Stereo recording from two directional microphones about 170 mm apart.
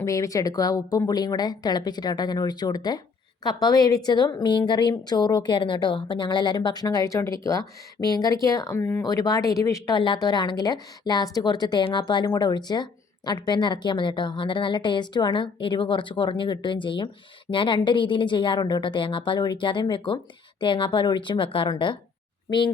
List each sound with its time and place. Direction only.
0.0 s speech: 20° left (ahead or behind)